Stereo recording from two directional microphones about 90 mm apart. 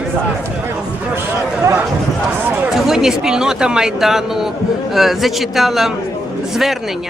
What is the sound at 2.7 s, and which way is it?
A man's voice, 5° right (ahead or behind).